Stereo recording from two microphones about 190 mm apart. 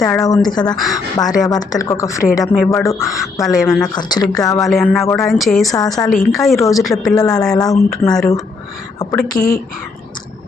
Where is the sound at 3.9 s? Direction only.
20° left (ahead or behind).